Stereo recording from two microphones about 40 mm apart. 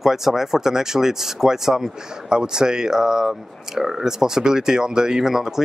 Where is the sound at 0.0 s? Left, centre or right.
Centre.